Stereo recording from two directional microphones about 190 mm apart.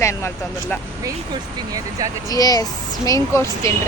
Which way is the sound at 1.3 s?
20° right (ahead or behind).